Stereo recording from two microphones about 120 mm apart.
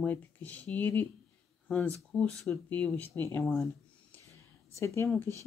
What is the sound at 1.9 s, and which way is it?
Speech, 5° left (ahead or behind).